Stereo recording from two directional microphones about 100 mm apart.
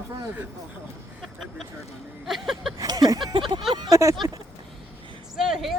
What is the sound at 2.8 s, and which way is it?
Speech, 40° right (ahead or behind).